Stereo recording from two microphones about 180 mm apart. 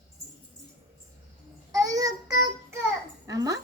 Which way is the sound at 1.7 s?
20° right (ahead or behind).